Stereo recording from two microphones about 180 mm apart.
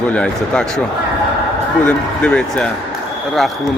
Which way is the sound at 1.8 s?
5° left (ahead or behind).